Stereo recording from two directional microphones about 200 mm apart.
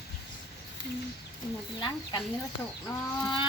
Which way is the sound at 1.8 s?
20° left (ahead or behind).